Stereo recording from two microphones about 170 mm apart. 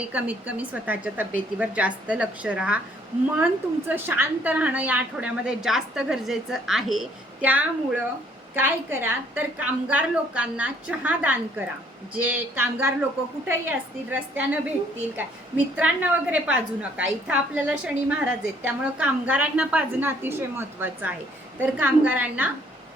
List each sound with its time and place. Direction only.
0.0 s a woman's voice: 10° right (ahead or behind)